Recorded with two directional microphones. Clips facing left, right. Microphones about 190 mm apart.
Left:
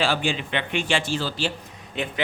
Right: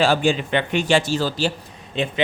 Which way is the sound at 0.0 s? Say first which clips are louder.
Right 6 dB; 45° right (ahead or behind).